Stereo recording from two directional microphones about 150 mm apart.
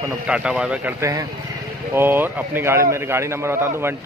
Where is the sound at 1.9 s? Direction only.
15° right (ahead or behind).